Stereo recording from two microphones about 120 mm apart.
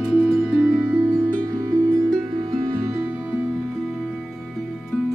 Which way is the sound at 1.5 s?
30° right (ahead or behind).